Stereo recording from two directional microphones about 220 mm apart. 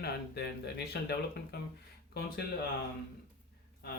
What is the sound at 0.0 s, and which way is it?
Speech, 50° left (ahead or behind).